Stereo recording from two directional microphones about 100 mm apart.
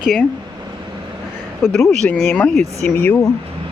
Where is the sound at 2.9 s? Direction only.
20° left (ahead or behind).